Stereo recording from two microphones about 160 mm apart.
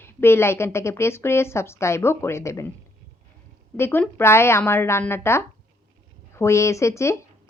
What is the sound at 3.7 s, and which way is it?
A woman's voice, 15° left (ahead or behind).